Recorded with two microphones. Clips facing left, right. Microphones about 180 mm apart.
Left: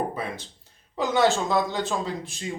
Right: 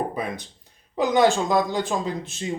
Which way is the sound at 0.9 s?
15° right (ahead or behind).